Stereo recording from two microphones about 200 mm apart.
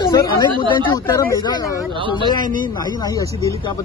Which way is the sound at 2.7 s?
20° left (ahead or behind).